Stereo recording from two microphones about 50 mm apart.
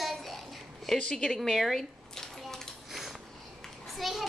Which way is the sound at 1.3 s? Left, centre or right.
Centre.